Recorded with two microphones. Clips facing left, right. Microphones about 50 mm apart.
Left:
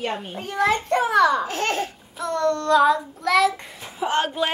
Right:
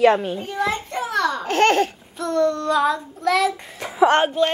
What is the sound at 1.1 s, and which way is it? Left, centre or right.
Speech, centre.